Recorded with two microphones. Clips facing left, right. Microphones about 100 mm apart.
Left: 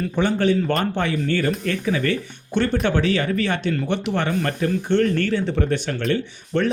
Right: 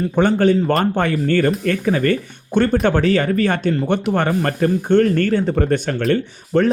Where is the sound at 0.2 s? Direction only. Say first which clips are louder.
Right 5 dB; 45° right (ahead or behind).